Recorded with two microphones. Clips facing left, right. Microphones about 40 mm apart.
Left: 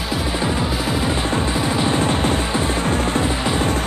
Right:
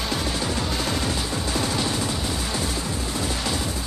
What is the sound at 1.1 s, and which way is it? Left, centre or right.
Music, left.